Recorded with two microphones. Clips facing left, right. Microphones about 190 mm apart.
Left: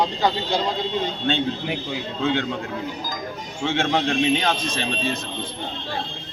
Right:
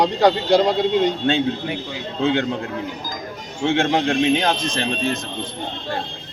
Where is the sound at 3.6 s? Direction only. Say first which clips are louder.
Right 4 dB; 15° right (ahead or behind).